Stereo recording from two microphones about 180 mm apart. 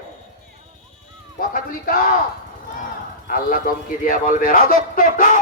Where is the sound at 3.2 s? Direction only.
50° left (ahead or behind).